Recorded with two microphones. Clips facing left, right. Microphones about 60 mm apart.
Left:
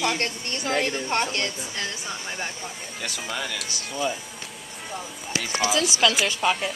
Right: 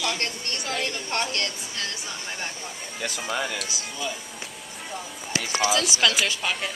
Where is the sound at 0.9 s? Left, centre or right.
Left.